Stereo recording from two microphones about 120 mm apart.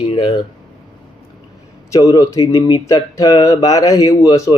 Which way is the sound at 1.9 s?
30° left (ahead or behind).